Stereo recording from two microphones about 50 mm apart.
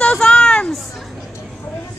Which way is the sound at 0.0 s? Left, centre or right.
Centre.